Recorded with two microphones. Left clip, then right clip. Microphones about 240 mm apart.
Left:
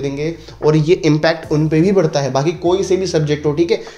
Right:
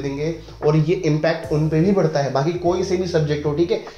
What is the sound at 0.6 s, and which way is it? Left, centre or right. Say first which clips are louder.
Speech: left 6 dB; left.